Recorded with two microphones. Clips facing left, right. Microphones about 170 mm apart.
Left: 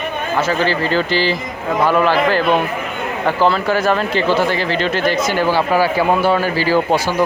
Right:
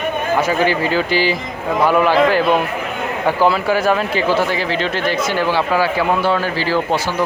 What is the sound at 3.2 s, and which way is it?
Speech, 10° right (ahead or behind).